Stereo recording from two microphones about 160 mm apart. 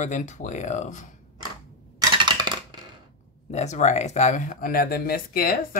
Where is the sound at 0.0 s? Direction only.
50° left (ahead or behind).